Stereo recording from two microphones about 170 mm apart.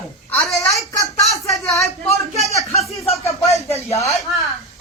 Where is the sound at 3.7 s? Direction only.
20° left (ahead or behind).